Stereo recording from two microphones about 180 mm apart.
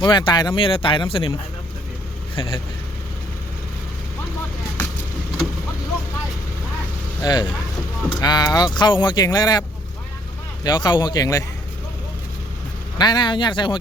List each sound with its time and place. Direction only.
0.0 s speech: 25° left (ahead or behind)
2.3 s speech: 30° left (ahead or behind)
7.2 s speech: 20° left (ahead or behind)
13.0 s speech: 25° left (ahead or behind)